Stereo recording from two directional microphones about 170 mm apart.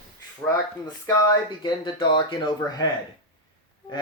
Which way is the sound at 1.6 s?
25° left (ahead or behind).